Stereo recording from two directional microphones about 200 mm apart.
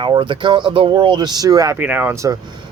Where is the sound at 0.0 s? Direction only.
25° right (ahead or behind).